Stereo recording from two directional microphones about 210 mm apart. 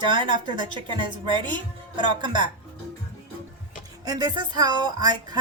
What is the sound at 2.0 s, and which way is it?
Music, 20° right (ahead or behind).